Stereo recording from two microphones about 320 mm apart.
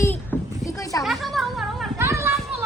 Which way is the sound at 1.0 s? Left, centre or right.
Centre.